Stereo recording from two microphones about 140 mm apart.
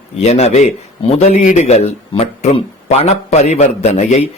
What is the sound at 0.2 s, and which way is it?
A man's voice, 50° left (ahead or behind).